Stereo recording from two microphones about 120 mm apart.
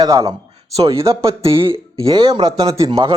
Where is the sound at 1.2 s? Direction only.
50° right (ahead or behind).